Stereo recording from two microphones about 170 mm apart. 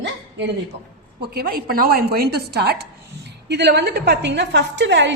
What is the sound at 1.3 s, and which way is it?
A woman's voice, 65° right (ahead or behind).